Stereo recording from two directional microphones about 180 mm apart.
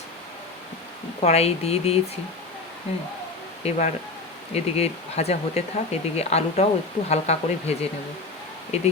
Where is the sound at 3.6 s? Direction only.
35° left (ahead or behind).